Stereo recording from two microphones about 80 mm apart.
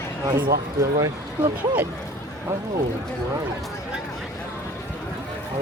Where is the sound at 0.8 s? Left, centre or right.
Right.